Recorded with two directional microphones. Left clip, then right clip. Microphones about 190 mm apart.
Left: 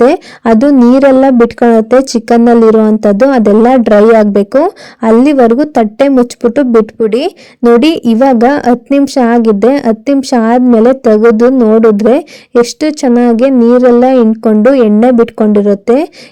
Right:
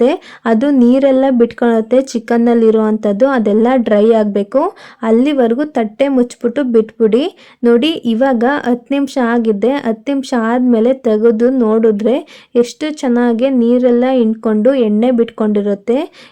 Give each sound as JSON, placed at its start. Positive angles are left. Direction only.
{"t": 0.0, "sound": "speech", "side_deg": 25}